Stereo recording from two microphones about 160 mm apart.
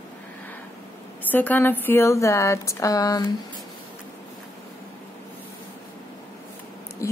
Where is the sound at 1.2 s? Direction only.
10° left (ahead or behind).